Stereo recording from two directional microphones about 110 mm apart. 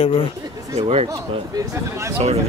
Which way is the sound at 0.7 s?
70° right (ahead or behind).